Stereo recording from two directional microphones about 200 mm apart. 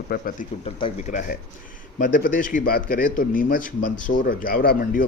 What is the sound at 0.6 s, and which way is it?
A man's voice, 35° left (ahead or behind).